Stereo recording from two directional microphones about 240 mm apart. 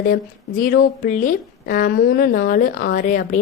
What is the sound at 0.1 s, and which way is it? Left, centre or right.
Speech, left.